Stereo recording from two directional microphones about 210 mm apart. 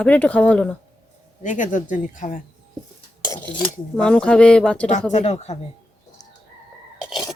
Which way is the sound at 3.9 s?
5° left (ahead or behind).